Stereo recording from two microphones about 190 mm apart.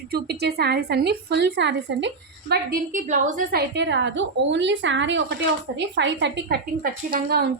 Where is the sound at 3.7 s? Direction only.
70° right (ahead or behind).